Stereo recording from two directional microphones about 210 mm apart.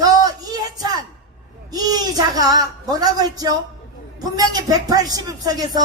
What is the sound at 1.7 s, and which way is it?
Speech, 20° right (ahead or behind).